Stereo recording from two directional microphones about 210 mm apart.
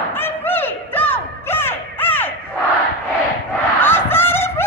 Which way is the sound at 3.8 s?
10° left (ahead or behind).